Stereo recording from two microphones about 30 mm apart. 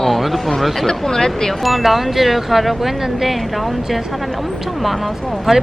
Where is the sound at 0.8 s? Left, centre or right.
Centre.